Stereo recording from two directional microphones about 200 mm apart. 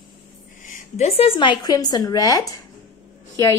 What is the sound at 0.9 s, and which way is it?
Speech, 30° left (ahead or behind).